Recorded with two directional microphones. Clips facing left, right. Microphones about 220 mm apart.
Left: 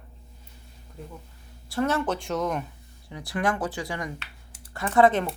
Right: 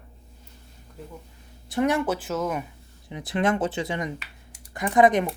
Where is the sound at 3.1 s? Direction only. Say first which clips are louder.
Right 3 dB; 20° right (ahead or behind).